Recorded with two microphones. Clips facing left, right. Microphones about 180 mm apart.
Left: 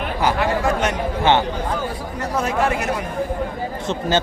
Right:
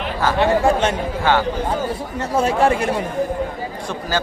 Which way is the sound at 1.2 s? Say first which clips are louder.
Left 1 dB; 20° left (ahead or behind).